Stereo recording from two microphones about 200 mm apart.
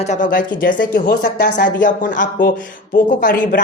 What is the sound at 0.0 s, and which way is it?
Speech, 40° left (ahead or behind).